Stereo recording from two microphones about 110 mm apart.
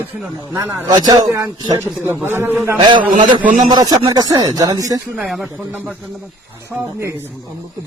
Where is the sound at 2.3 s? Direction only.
20° right (ahead or behind).